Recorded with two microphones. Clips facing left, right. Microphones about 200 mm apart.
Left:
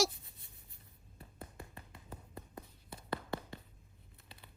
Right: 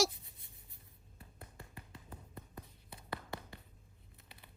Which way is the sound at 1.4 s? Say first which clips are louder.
Left 4 dB; 25° left (ahead or behind).